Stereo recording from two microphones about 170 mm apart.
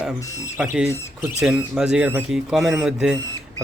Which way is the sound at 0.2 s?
20° left (ahead or behind).